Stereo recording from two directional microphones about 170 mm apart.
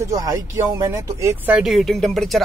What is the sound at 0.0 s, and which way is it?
Speech, 20° right (ahead or behind).